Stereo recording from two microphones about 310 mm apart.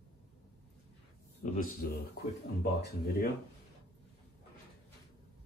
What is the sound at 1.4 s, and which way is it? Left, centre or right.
Speech, left.